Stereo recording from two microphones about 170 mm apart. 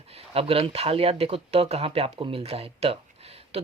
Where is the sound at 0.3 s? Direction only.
35° right (ahead or behind).